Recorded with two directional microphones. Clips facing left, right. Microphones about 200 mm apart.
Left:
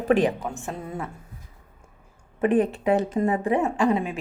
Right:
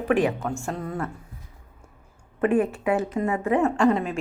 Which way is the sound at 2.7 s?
35° left (ahead or behind).